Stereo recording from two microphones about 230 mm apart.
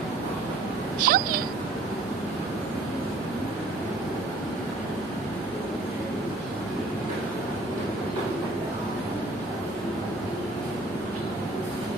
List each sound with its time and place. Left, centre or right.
1.1 s speech: right